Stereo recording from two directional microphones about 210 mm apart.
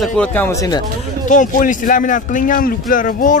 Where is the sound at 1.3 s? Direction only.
35° left (ahead or behind).